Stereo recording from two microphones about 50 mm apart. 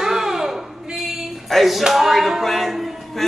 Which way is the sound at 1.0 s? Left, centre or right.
Centre.